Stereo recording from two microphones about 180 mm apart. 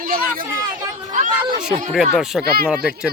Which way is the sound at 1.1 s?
45° right (ahead or behind).